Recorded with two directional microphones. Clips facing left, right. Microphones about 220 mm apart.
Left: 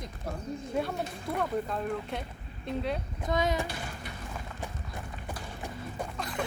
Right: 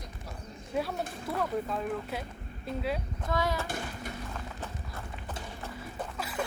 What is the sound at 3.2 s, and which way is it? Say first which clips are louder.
Speech: left 2 dB; 20° left (ahead or behind).